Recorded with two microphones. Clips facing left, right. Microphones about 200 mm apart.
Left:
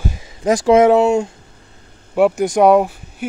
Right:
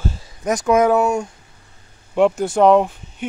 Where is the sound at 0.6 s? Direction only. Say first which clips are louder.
Left 4 dB; 25° left (ahead or behind).